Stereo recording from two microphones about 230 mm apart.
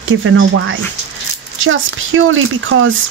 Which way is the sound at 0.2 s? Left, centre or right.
Right.